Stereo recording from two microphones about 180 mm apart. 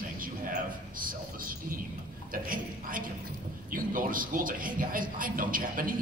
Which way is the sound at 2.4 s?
50° right (ahead or behind).